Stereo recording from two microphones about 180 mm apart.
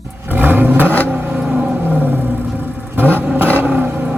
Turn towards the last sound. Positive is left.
turn(degrees=-10)  # may be behind; listen again after turning